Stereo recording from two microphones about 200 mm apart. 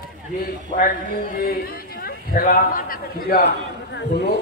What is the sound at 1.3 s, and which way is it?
A man's voice, 50° left (ahead or behind).